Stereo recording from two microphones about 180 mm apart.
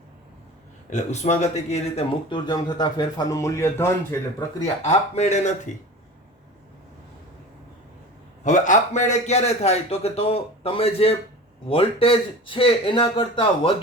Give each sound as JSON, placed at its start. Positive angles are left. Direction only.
{"t": 0.9, "sound": "a man's voice", "side_deg": 40}
{"t": 2.3, "sound": "a man's voice", "side_deg": 25}
{"t": 4.6, "sound": "a man's voice", "side_deg": 35}
{"t": 8.4, "sound": "a man's voice", "side_deg": 45}